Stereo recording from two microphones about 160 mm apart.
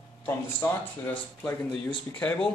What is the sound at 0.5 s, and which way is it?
Speech, 15° left (ahead or behind).